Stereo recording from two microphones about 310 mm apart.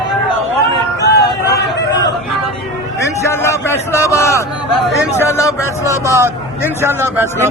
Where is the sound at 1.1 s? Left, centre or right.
Left.